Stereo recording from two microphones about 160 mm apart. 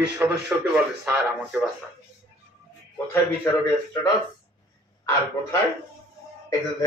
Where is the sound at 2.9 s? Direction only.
20° left (ahead or behind).